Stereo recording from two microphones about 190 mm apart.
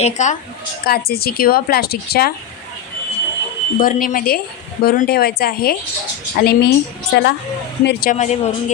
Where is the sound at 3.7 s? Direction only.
45° left (ahead or behind).